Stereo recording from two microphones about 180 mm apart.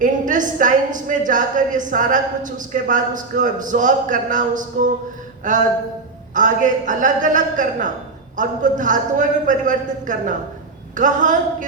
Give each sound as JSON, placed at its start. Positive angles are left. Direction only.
{"t": 0.0, "sound": "a woman's voice", "side_deg": -45}